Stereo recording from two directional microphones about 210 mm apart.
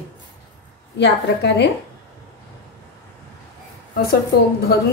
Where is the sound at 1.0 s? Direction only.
55° left (ahead or behind).